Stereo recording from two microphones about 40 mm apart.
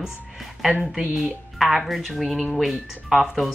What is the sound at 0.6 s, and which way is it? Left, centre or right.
A woman's voice, centre.